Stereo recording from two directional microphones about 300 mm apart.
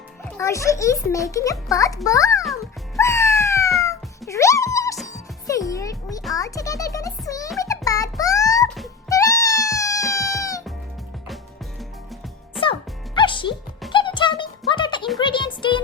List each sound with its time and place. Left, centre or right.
0.3 s a child's voice: centre
2.4 s music: centre
3.8 s cat: centre
5.0 s music: centre
6.3 s a child's voice: centre
7.6 s music: centre
13.1 s music: centre